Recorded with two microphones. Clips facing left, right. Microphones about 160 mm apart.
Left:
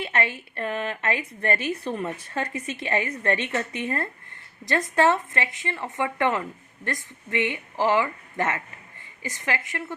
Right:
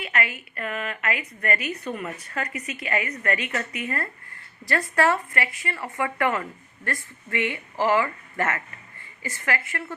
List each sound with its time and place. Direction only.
0.0 s a woman's voice: 30° left (ahead or behind)